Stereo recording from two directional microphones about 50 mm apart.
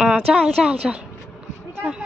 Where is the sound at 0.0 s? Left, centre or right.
Centre.